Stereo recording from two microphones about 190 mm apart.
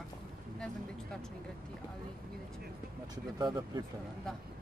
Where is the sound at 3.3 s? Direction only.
20° right (ahead or behind).